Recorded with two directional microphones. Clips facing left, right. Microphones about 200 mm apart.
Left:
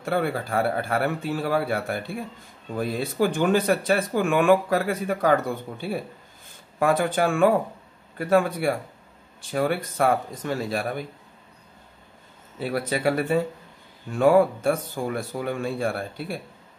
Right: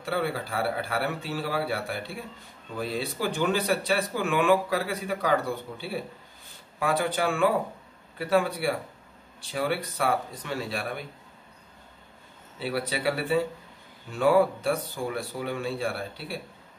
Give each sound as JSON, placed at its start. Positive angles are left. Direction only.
{"t": 0.0, "sound": "speech", "side_deg": 50}
{"t": 12.5, "sound": "speech", "side_deg": 45}